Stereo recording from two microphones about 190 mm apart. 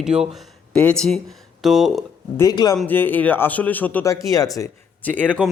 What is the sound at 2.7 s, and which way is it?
Speech, 10° left (ahead or behind).